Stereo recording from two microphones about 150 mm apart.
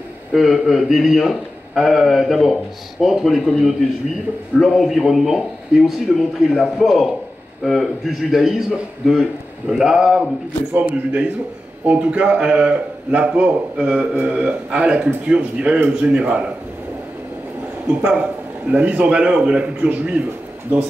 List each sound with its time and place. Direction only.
0.3 s a man's voice: centre (ahead or behind)
18.7 s a man's voice: 10° right (ahead or behind)